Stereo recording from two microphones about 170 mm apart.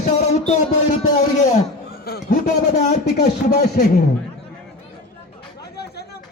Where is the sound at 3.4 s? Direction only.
55° left (ahead or behind).